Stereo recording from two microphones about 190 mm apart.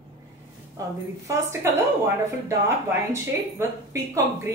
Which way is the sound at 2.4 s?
15° right (ahead or behind).